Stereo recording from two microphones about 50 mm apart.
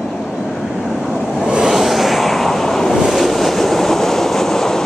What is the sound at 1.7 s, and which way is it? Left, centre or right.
Vehicle, centre.